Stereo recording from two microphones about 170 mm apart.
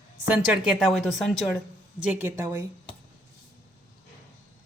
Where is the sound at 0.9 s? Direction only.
Centre (ahead or behind).